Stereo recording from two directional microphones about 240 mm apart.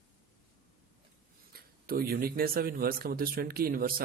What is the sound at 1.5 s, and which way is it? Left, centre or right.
Speech, right.